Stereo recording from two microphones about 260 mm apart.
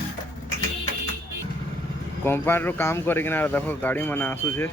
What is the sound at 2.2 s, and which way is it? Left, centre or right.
Speech, centre.